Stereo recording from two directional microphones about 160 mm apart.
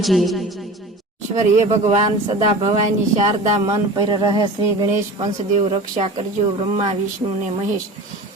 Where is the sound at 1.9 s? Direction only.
40° right (ahead or behind).